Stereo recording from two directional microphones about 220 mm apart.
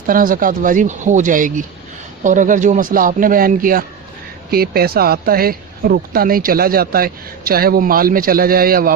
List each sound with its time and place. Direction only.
0.1 s speech: 40° right (ahead or behind)